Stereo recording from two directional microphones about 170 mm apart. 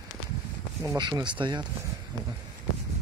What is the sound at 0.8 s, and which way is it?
Speech, 20° right (ahead or behind).